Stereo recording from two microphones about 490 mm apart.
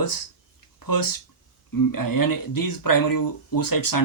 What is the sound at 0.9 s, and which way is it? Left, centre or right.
Speech, left.